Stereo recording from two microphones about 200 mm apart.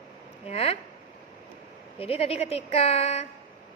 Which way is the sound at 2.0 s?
30° left (ahead or behind).